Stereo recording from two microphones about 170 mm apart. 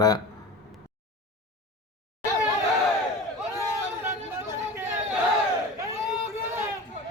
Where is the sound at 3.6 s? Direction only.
15° right (ahead or behind).